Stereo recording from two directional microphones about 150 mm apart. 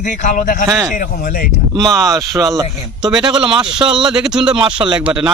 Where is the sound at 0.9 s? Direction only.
65° left (ahead or behind).